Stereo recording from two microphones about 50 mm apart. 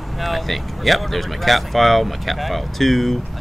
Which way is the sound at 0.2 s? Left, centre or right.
Centre.